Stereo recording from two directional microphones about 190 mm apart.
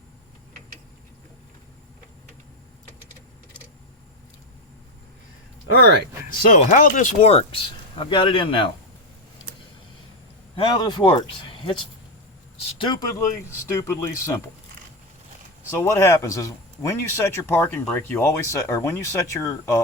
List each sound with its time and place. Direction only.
6.3 s speech: 45° left (ahead or behind); by 8.7 s 25° left (ahead or behind)
10.5 s speech: 25° left (ahead or behind)
12.8 s speech: 25° left (ahead or behind)
15.7 s speech: 15° left (ahead or behind)